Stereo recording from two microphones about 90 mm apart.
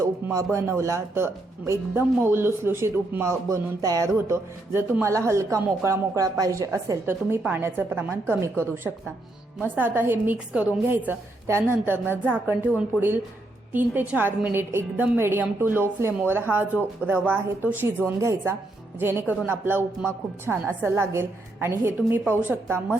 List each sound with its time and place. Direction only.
0.0 s speech: 40° right (ahead or behind)
4.3 s speech: 25° right (ahead or behind)
7.0 s a woman's voice: 25° right (ahead or behind)
18.0 s a woman's voice: 30° right (ahead or behind)
20.5 s a woman's voice: 5° right (ahead or behind)
20.8 s a woman's voice: 25° right (ahead or behind)